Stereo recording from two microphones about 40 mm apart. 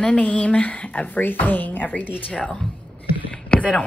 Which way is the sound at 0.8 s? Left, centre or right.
Left.